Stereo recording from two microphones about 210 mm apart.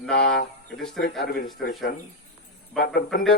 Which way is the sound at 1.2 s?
45° left (ahead or behind).